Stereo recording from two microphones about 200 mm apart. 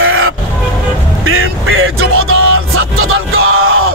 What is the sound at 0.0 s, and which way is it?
Vehicle, 90° right.